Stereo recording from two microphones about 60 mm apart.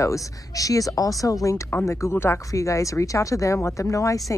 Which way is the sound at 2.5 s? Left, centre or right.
Left.